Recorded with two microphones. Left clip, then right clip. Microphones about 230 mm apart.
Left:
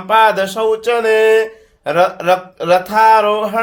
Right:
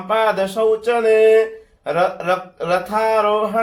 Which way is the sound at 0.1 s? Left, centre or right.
Left.